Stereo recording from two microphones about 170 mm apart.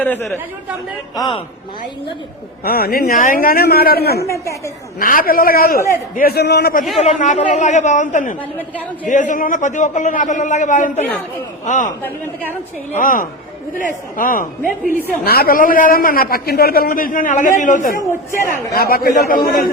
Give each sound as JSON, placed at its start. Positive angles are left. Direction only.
{"t": 0.0, "sound": "speech", "side_deg": 10}
{"t": 1.1, "sound": "a man's voice", "side_deg": 20}
{"t": 2.6, "sound": "a man's voice", "side_deg": 65}
{"t": 4.3, "sound": "a woman's voice", "side_deg": 15}
{"t": 4.9, "sound": "a man's voice", "side_deg": 55}
{"t": 7.0, "sound": "a man's voice", "side_deg": 45}
{"t": 8.4, "sound": "a woman's voice", "side_deg": 10}
{"t": 9.0, "sound": "a man's voice", "side_deg": 50}
{"t": 18.7, "sound": "a man's voice", "side_deg": 60}